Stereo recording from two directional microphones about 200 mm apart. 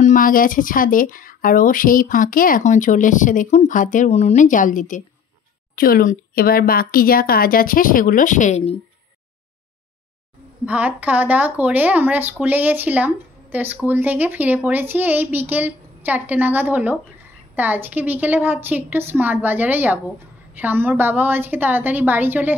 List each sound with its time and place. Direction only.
0.0 s a woman's voice: 40° left (ahead or behind)
10.6 s a woman's voice: 5° right (ahead or behind)